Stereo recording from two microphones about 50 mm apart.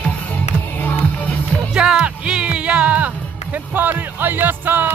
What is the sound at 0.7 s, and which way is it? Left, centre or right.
Music, left.